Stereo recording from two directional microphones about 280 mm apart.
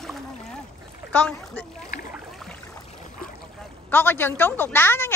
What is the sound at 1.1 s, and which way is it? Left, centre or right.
Speech, centre.